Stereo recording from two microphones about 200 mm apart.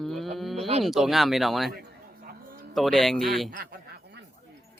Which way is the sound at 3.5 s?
50° right (ahead or behind).